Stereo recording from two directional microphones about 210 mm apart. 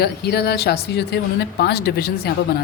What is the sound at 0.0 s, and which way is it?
A woman's voice, 50° left (ahead or behind).